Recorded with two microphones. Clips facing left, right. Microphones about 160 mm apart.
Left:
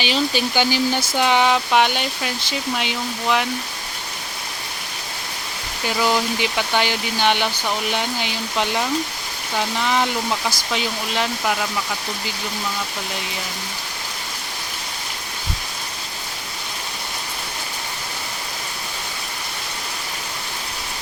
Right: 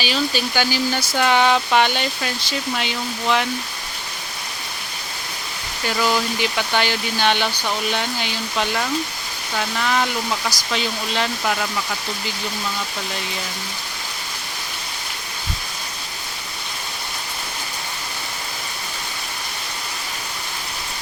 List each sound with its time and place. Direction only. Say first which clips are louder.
0.0 s speech: left 1 dB; 20° left (ahead or behind)
6.0 s speech: left 1 dB; 15° left (ahead or behind)